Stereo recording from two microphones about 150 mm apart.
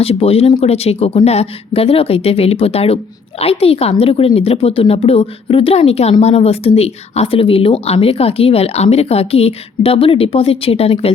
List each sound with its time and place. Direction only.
0.0 s speech: 40° left (ahead or behind)